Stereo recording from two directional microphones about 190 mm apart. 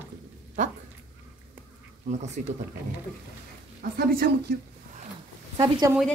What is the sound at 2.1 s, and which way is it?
Speech, 35° right (ahead or behind).